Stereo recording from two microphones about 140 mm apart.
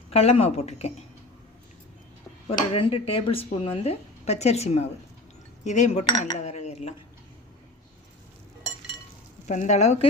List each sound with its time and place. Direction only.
0.1 s speech: 45° left (ahead or behind)
2.5 s speech: 40° left (ahead or behind)
9.5 s speech: 60° left (ahead or behind)